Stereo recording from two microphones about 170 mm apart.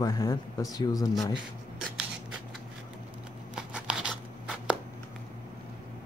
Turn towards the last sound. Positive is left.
turn(degrees=-5)  # may be behind; listen again after turning